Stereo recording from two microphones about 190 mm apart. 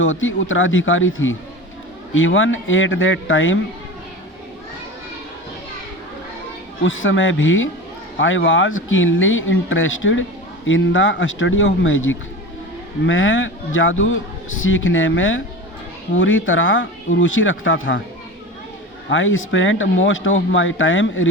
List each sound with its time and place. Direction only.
0.0 s a man's voice: 90° left
6.8 s a man's voice: 90° left
19.1 s speech: 80° left